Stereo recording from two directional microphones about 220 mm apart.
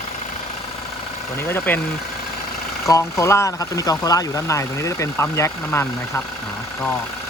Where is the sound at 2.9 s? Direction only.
15° left (ahead or behind).